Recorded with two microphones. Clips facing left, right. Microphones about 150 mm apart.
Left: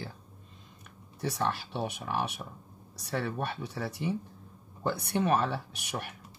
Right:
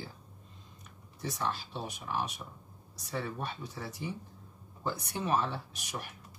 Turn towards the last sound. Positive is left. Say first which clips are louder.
# left 4 dB
turn(degrees=65)  # may be behind; listen again after turning